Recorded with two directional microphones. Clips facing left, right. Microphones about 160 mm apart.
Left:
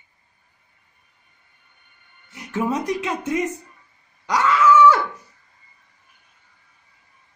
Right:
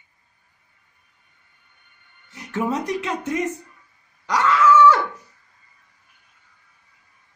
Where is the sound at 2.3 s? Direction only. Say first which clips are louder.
Left 1 dB; 5° left (ahead or behind).